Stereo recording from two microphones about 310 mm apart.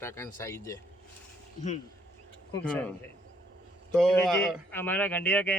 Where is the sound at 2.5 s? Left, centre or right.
Centre.